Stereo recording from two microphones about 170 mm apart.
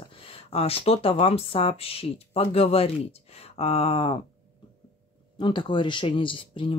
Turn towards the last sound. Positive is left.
turn(degrees=30)  # may be behind; listen again after turning